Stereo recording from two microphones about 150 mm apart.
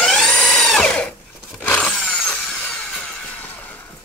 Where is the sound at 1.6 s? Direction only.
5° left (ahead or behind).